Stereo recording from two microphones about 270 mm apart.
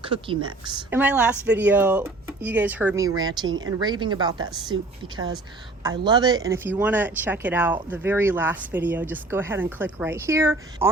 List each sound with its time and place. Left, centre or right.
0.0 s speech: centre
0.9 s speech: centre